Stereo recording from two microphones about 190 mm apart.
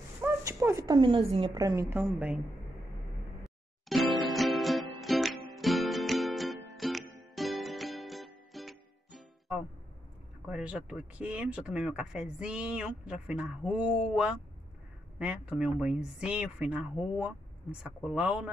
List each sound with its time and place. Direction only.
0.2 s a woman's voice: 15° right (ahead or behind)
3.4 s music: centre (ahead or behind)
10.4 s speech: 5° right (ahead or behind)